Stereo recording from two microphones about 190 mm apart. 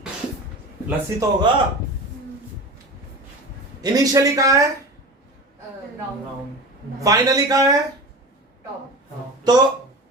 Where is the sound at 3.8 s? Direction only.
20° right (ahead or behind).